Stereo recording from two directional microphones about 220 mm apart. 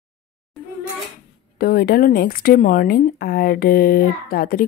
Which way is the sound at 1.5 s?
45° left (ahead or behind).